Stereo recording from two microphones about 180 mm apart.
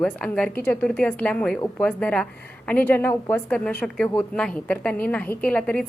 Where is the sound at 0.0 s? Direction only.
5° left (ahead or behind).